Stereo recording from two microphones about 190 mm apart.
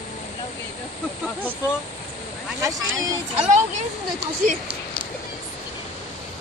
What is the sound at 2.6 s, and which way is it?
Speech, 15° right (ahead or behind).